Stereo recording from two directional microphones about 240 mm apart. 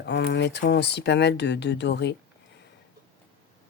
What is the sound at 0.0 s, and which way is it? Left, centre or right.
Speech, left.